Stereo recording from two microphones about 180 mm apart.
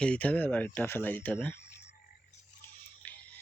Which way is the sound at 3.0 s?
10° left (ahead or behind).